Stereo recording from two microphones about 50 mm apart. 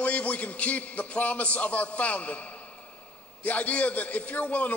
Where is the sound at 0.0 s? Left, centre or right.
Left.